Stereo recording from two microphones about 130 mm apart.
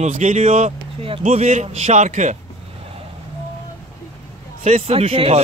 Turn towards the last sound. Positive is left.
turn(degrees=-50)  # may be behind; listen again after turning